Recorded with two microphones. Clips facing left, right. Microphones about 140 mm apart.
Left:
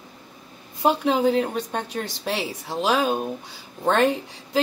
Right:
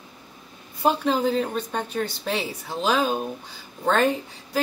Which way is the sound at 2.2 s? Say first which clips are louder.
Even; 10° left (ahead or behind).